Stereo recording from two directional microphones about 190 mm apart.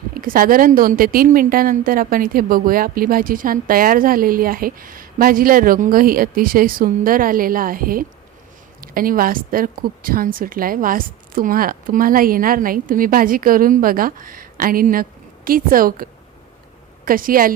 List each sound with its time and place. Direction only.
0.1 s speech: 50° right (ahead or behind)
17.1 s speech: 45° right (ahead or behind)